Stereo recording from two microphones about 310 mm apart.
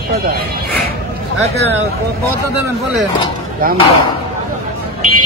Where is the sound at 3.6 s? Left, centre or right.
Right.